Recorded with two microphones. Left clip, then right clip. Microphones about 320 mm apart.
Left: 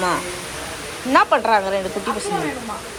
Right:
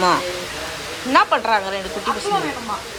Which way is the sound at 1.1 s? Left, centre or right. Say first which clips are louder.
Left 1 dB; centre.